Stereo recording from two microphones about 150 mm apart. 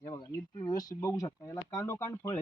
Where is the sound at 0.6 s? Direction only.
25° left (ahead or behind).